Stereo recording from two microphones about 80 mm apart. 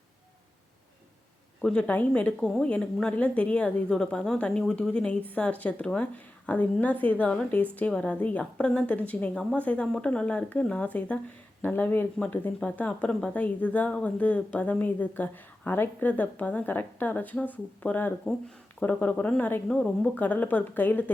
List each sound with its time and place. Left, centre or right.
1.6 s speech: centre
19.6 s speech: centre
20.1 s speech: centre